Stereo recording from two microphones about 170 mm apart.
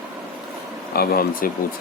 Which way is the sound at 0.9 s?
65° left (ahead or behind).